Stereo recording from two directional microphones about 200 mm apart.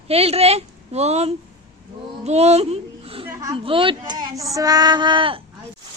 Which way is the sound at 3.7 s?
25° right (ahead or behind).